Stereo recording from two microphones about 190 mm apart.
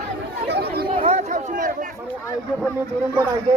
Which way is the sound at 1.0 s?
35° right (ahead or behind).